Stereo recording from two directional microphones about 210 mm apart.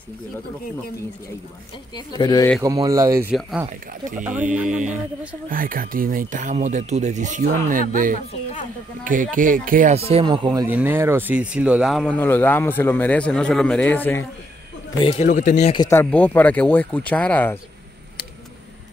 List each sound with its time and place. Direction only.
2.0 s speech: 20° left (ahead or behind)
2.6 s speech: 15° right (ahead or behind)
3.3 s speech: centre (ahead or behind)
4.6 s speech: 35° right (ahead or behind); by 14.2 s 10° left (ahead or behind)
15.0 s speech: 30° left (ahead or behind)
15.6 s speech: 25° left (ahead or behind)
15.9 s speech: 10° left (ahead or behind)